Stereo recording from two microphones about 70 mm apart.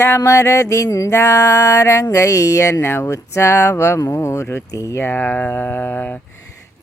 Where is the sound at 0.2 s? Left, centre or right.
Left.